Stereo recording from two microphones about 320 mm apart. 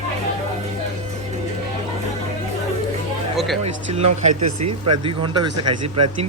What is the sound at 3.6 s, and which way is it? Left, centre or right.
Speech, centre.